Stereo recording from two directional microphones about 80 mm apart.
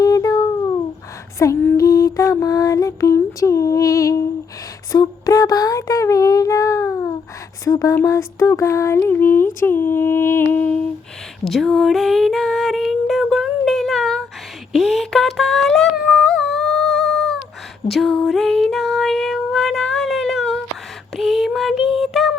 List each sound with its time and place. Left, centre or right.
0.0 s a sound: left
1.4 s music: left
4.9 s a sound: left
7.6 s music: left
8.0 s a sound: left
9.0 s humming: left
11.4 s female singing: centre
14.7 s humming: centre
17.8 s music: centre
21.2 s child singing: centre